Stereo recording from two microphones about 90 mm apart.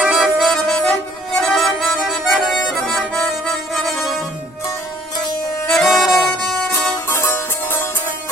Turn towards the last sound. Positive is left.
turn(degrees=30)  # may be behind; listen again after turning